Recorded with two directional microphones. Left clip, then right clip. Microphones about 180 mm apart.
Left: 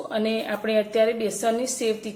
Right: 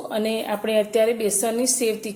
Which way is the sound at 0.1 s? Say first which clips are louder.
Right 2 dB; 20° right (ahead or behind).